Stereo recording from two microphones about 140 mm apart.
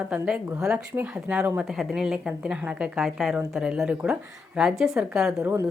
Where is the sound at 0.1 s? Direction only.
10° right (ahead or behind).